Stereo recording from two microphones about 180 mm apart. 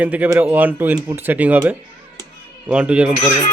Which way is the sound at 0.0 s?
10° right (ahead or behind).